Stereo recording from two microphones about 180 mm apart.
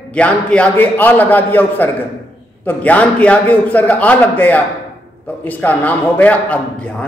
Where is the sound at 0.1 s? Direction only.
5° left (ahead or behind).